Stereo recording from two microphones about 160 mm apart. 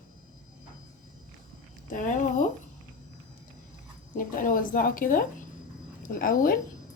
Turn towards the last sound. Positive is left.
turn(degrees=60)  # may be behind; listen again after turning